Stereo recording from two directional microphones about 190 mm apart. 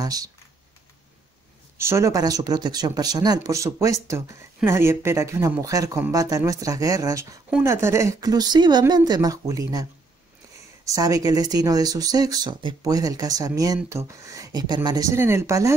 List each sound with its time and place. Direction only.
0.0 s speech: 20° right (ahead or behind)
1.8 s speech: 15° right (ahead or behind)
10.9 s speech: 15° right (ahead or behind)